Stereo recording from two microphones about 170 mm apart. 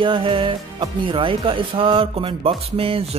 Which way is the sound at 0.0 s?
30° right (ahead or behind).